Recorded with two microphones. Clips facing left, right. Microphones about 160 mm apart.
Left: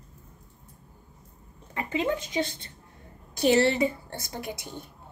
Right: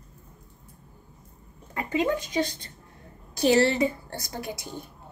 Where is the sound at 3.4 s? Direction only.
35° right (ahead or behind).